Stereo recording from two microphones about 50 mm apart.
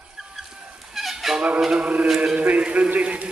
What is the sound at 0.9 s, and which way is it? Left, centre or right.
Music, centre.